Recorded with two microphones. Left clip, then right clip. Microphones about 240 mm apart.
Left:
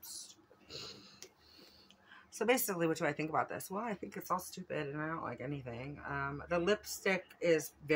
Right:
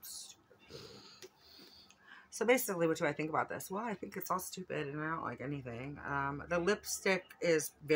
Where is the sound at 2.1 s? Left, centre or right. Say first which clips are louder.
Right 2 dB; centre.